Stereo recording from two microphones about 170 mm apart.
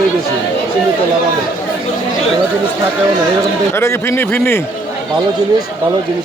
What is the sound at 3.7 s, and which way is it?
Speech, 15° left (ahead or behind).